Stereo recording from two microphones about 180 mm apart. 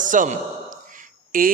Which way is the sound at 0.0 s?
45° right (ahead or behind).